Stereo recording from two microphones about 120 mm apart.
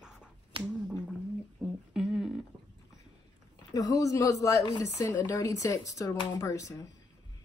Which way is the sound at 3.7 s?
30° left (ahead or behind).